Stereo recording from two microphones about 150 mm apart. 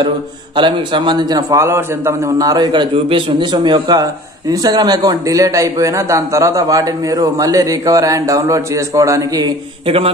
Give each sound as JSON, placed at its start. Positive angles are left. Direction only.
{"t": 0.6, "sound": "a man's voice", "side_deg": -30}
{"t": 9.8, "sound": "a man's voice", "side_deg": -40}